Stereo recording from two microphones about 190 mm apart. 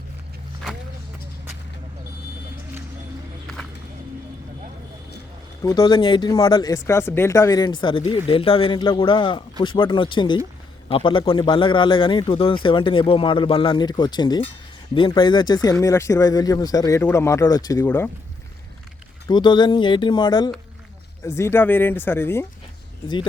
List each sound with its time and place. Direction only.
3.4 s a sound: centre (ahead or behind)
5.6 s speech: 20° left (ahead or behind)
19.3 s speech: 25° left (ahead or behind)